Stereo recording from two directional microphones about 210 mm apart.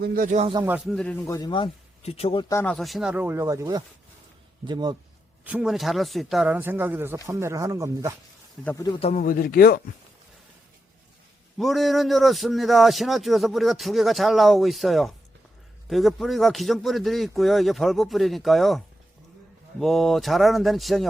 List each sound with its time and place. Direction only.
0.0 s speech: 45° right (ahead or behind)
0.5 s speech: 10° right (ahead or behind)
0.9 s speech: 10° left (ahead or behind); by 4.9 s 20° right (ahead or behind)
5.5 s speech: 5° right (ahead or behind)
8.6 s a man's voice: 15° left (ahead or behind)
9.0 s speech: 30° left (ahead or behind)
9.2 s speech: 45° left (ahead or behind)
11.5 s speech: centre (ahead or behind)
19.8 s speech: centre (ahead or behind)